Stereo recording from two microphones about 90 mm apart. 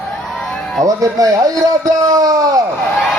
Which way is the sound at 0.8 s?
40° right (ahead or behind).